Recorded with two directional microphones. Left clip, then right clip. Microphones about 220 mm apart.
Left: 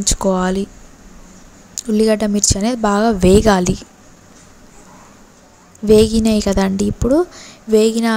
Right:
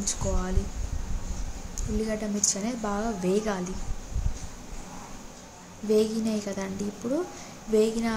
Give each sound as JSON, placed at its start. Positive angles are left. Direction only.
{"t": 0.0, "sound": "a woman's voice", "side_deg": 40}
{"t": 2.0, "sound": "a woman's voice", "side_deg": 40}
{"t": 5.9, "sound": "a woman's voice", "side_deg": 40}